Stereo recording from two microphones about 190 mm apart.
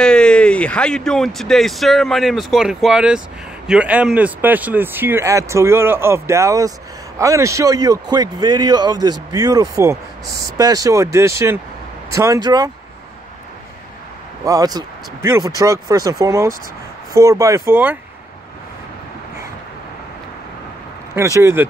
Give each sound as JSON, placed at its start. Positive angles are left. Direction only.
{"t": 0.0, "sound": "a man's voice", "side_deg": 5}
{"t": 14.4, "sound": "speech", "side_deg": -20}
{"t": 21.1, "sound": "speech", "side_deg": -15}